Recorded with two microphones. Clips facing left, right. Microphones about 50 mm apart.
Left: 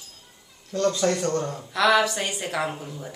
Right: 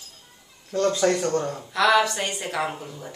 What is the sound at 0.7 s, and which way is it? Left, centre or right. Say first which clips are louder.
Speech: right 2 dB; right.